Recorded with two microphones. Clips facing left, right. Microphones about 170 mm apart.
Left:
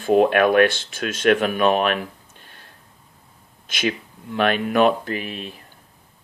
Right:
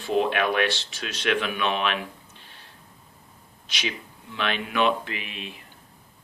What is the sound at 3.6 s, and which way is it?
Speech, 50° left (ahead or behind).